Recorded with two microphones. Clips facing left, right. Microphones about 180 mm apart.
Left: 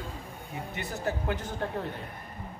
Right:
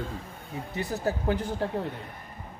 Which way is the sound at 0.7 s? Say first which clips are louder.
Right 4 dB; 35° right (ahead or behind).